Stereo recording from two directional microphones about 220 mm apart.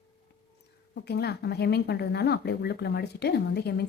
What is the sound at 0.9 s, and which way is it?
Speech, 45° left (ahead or behind).